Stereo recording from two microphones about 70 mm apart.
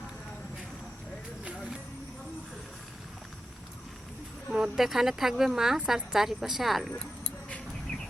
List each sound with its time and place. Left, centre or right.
4.5 s speech: centre
6.9 s keys jangling: centre